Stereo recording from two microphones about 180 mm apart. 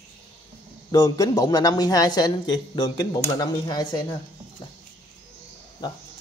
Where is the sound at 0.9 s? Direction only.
20° left (ahead or behind).